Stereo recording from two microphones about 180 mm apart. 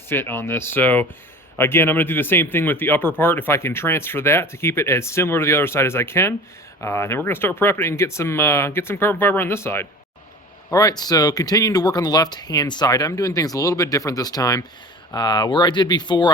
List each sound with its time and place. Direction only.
0.1 s speech: 10° left (ahead or behind)